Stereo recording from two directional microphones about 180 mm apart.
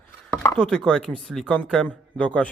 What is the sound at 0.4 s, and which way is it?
Speech, 5° left (ahead or behind).